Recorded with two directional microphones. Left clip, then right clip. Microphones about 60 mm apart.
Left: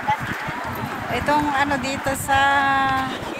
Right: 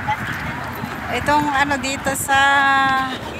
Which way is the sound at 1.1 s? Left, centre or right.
Right.